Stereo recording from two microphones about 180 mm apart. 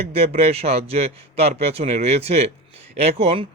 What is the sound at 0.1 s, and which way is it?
Speech, 35° right (ahead or behind).